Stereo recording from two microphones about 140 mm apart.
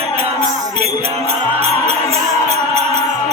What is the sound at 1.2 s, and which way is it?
Music, 45° right (ahead or behind).